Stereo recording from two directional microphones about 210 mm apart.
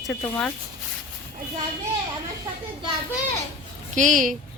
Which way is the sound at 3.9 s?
35° right (ahead or behind).